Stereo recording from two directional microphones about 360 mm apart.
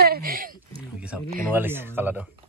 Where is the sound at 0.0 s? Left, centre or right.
Right.